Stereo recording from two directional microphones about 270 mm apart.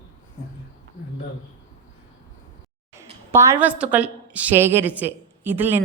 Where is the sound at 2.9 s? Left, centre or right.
Centre.